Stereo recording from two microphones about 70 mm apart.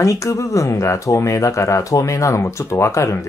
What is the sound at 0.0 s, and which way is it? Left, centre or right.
Speech, left.